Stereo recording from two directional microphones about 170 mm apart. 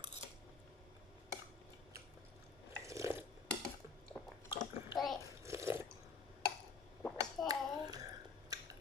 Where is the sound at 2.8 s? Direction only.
20° right (ahead or behind).